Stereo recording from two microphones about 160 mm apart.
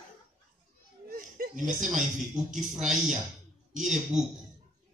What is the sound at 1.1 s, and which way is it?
Chuckle, 60° right (ahead or behind).